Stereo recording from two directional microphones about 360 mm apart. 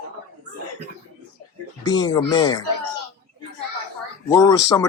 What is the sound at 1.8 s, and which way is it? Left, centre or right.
Speech, centre.